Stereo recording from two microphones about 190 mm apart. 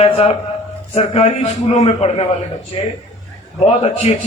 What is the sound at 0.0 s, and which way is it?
A man's voice, 30° left (ahead or behind).